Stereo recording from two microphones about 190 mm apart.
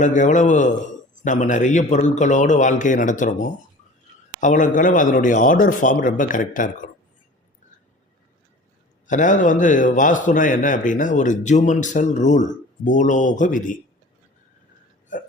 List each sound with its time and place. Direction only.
0.0 s a man's voice: 40° left (ahead or behind)
9.0 s a man's voice: 40° left (ahead or behind)
15.1 s speech: 45° left (ahead or behind)